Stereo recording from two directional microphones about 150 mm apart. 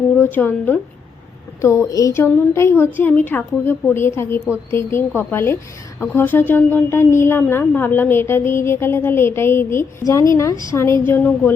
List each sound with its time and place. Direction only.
0.2 s a woman's voice: 15° left (ahead or behind)